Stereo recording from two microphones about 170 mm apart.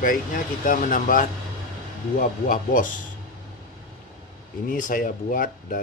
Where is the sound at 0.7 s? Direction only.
50° left (ahead or behind).